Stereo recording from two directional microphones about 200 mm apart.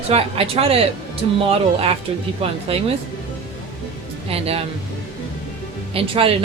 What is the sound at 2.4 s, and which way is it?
Speech, 25° right (ahead or behind).